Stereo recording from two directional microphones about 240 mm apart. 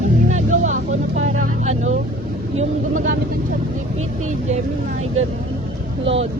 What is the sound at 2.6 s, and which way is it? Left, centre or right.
Speech, right.